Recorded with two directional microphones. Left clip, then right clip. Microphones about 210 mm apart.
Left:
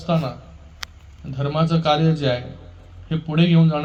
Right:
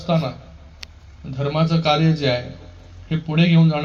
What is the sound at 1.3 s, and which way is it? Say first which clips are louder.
A man's voice: right 1 dB; 15° right (ahead or behind).